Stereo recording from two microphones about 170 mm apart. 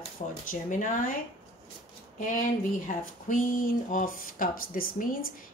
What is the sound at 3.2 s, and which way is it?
Speech, 55° left (ahead or behind).